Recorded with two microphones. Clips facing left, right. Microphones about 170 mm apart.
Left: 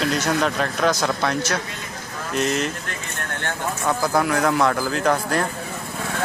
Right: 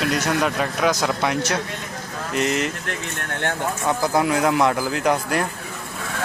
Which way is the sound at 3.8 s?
15° right (ahead or behind).